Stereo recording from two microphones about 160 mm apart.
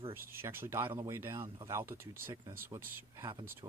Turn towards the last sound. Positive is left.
turn(degrees=-20)  # may be behind; listen again after turning